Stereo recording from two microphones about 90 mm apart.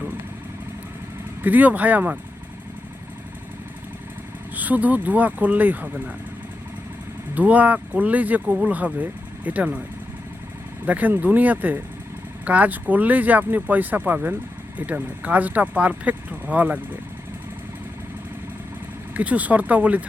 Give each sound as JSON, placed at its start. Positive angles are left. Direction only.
{"t": 1.4, "sound": "speech", "side_deg": -20}
{"t": 4.5, "sound": "speech", "side_deg": -20}
{"t": 7.3, "sound": "speech", "side_deg": -15}
{"t": 10.8, "sound": "speech", "side_deg": -20}
{"t": 19.1, "sound": "speech", "side_deg": -15}